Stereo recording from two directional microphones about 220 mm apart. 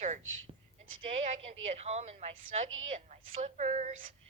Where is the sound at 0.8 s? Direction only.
65° right (ahead or behind).